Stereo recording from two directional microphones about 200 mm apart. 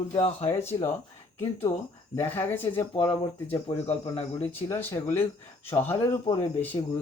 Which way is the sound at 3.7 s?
30° left (ahead or behind).